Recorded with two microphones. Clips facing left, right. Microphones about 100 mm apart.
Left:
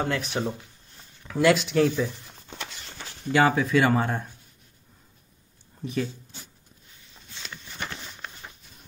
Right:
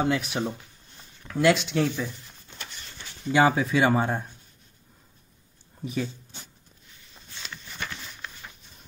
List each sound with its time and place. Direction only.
0.0 s speech: 10° right (ahead or behind)
3.3 s speech: 10° right (ahead or behind)
5.8 s speech: centre (ahead or behind)
7.9 s a sound: 25° left (ahead or behind)